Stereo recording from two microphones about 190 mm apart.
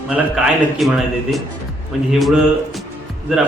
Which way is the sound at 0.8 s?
Centre (ahead or behind).